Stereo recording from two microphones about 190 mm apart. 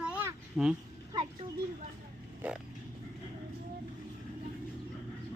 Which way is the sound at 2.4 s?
10° right (ahead or behind).